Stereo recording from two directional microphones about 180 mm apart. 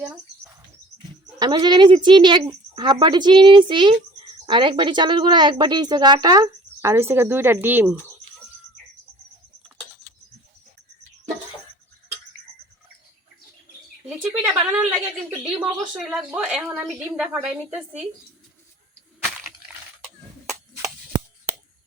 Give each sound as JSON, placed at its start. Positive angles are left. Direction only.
{"t": 1.4, "sound": "a woman's voice", "side_deg": -25}
{"t": 14.1, "sound": "a sound", "side_deg": -5}
{"t": 15.8, "sound": "a woman's voice", "side_deg": -5}
{"t": 20.8, "sound": "shuffling cards", "side_deg": -15}